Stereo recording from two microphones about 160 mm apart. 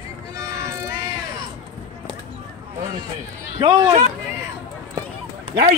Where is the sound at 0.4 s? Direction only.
20° right (ahead or behind).